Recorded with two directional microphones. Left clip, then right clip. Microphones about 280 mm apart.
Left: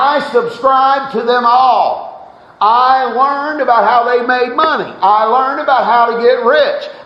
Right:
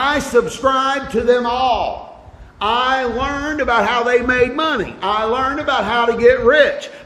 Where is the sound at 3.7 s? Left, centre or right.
Right.